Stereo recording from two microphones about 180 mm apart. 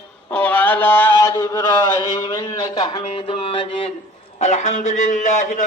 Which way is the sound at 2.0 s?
20° left (ahead or behind).